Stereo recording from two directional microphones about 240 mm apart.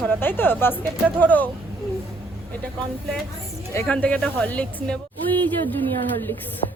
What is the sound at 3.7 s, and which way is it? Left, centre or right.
Speech, centre.